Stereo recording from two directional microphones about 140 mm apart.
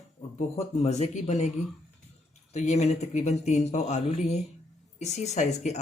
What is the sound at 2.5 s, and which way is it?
Speech, 55° left (ahead or behind).